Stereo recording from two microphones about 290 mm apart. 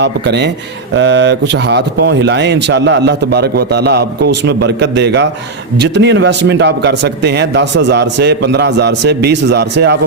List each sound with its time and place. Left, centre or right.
0.0 s speech: right